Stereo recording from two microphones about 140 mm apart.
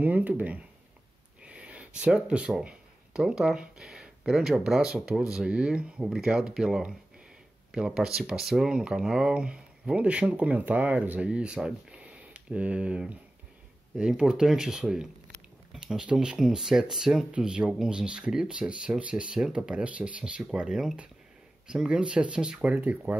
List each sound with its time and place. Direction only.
0.0 s speech: 10° right (ahead or behind)